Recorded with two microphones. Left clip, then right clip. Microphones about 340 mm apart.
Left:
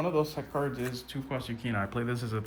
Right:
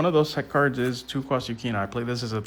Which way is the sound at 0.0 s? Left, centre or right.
Right.